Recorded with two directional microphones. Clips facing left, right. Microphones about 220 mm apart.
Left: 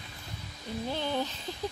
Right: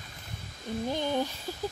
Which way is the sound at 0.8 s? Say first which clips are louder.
Right 2 dB; 15° right (ahead or behind).